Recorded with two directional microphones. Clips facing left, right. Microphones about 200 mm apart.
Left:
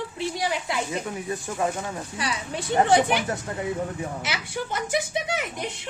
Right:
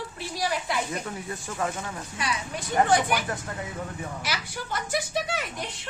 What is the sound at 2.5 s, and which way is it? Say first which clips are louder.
Speech: left 3 dB; 25° left (ahead or behind).